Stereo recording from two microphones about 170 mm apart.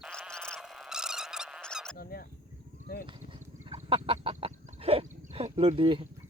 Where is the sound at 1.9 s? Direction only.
60° left (ahead or behind).